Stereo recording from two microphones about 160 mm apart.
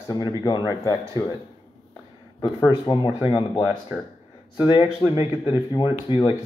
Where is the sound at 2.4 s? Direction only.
25° left (ahead or behind).